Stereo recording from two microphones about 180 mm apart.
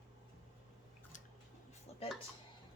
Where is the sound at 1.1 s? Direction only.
45° left (ahead or behind).